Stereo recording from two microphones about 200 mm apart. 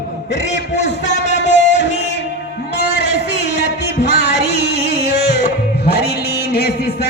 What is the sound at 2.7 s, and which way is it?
Music, 55° left (ahead or behind).